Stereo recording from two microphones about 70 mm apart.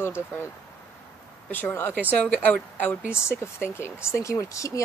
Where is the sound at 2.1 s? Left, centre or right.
Left.